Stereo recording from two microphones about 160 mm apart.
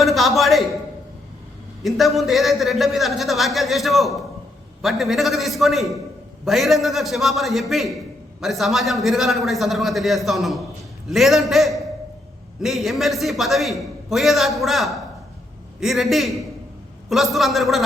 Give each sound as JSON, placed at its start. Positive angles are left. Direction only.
{"t": 0.0, "sound": "a man's voice", "side_deg": 0}
{"t": 1.8, "sound": "a man's voice", "side_deg": 0}